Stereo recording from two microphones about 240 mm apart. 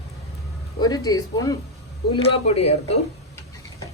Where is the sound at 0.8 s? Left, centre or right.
Centre.